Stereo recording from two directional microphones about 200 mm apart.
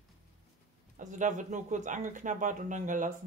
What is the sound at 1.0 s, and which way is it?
Speech, 40° right (ahead or behind).